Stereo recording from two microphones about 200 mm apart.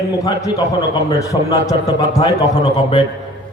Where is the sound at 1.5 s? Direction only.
20° left (ahead or behind).